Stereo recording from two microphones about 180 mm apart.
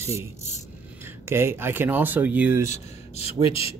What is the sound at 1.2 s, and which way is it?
Speech, 15° right (ahead or behind).